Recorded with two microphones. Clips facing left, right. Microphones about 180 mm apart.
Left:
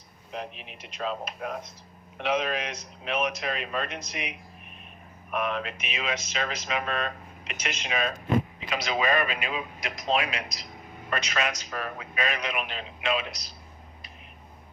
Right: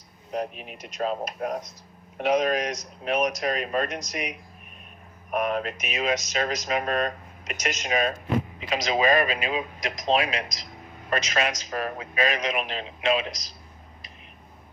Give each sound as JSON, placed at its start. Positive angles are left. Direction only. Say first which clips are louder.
{"t": 0.3, "sound": "a man's voice", "louder": "right 7 dB", "side_deg": -45}